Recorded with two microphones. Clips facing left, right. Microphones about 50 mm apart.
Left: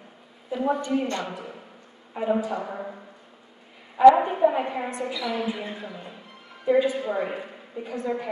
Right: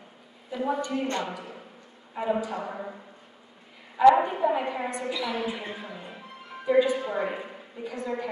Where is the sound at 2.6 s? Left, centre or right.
Centre.